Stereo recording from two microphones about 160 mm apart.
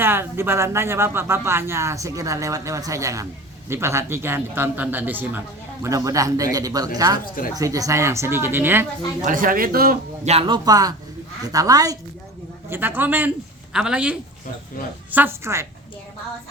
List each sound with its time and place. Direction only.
0.0 s speech: 15° right (ahead or behind)
9.2 s a man's voice: 60° right (ahead or behind)
10.2 s speech: 35° right (ahead or behind)
12.7 s speech: 10° right (ahead or behind)